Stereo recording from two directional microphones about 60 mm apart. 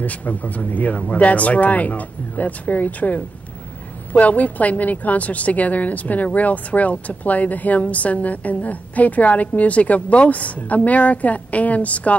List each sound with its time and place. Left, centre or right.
0.0 s a woman's voice: left